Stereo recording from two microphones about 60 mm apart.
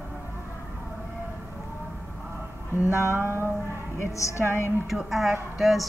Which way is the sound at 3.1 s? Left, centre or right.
Right.